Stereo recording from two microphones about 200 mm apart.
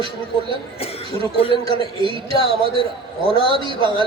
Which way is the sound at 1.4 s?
30° left (ahead or behind).